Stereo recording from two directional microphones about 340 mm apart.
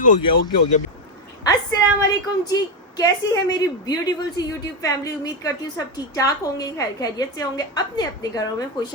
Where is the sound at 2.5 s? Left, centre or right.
Centre.